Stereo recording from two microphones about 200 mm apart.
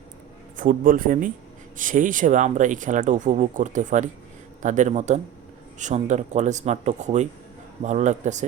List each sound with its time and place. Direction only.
0.5 s speech: 40° right (ahead or behind)